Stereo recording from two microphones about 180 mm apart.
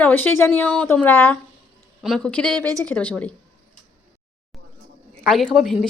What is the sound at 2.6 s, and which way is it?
Speech, 20° right (ahead or behind).